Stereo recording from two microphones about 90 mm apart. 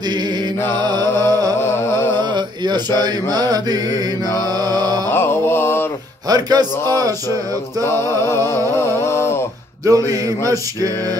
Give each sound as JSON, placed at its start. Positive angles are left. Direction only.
{"t": 0.1, "sound": "mantra", "side_deg": -55}
{"t": 1.1, "sound": "music", "side_deg": 25}
{"t": 2.1, "sound": "a sound", "side_deg": -55}
{"t": 3.0, "sound": "mantra", "side_deg": -50}
{"t": 5.1, "sound": "music", "side_deg": 25}
{"t": 6.2, "sound": "speech", "side_deg": -50}
{"t": 6.9, "sound": "mantra", "side_deg": -45}
{"t": 8.3, "sound": "a sound", "side_deg": 30}
{"t": 9.8, "sound": "a sound", "side_deg": -40}